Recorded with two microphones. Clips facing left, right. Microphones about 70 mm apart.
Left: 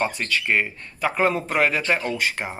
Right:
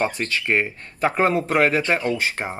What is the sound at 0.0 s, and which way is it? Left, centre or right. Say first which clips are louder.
Speech: right 1 dB; right.